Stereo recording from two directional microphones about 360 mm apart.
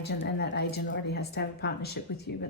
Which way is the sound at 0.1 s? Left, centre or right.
Left.